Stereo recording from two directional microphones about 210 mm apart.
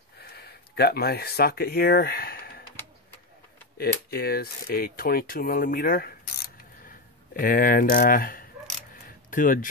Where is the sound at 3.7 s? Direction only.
45° left (ahead or behind).